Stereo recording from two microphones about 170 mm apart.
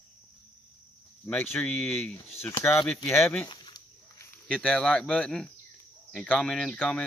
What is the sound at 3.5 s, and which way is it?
Dog, 25° left (ahead or behind).